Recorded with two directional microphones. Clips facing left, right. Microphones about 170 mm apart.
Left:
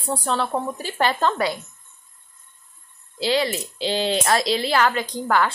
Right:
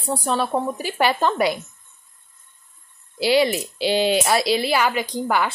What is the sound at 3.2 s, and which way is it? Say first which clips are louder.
A woman's voice: right 4 dB; 10° right (ahead or behind).